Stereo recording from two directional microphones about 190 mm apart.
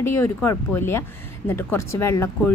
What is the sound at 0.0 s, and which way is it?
A woman's voice, 15° left (ahead or behind).